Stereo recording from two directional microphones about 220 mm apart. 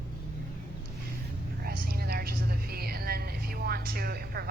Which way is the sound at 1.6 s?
45° right (ahead or behind).